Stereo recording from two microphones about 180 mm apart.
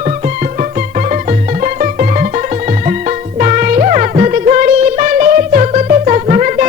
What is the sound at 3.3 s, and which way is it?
Music, 45° right (ahead or behind).